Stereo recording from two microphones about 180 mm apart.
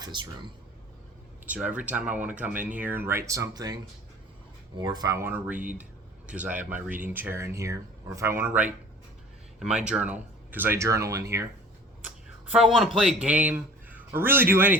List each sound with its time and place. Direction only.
0.0 s speech: 25° right (ahead or behind)
1.5 s speech: 10° right (ahead or behind)
4.8 s speech: 20° right (ahead or behind)
12.0 s speech: 5° right (ahead or behind)